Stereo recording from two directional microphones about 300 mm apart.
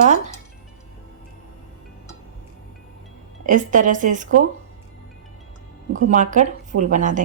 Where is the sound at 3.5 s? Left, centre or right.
Right.